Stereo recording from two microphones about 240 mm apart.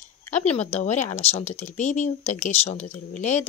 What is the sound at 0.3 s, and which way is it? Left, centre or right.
A woman's voice, left.